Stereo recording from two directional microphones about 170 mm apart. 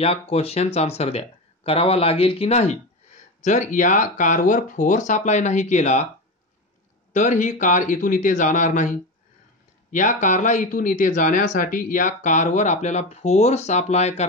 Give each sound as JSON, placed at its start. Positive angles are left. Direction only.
{"t": 0.0, "sound": "speech", "side_deg": 35}
{"t": 7.1, "sound": "speech", "side_deg": 45}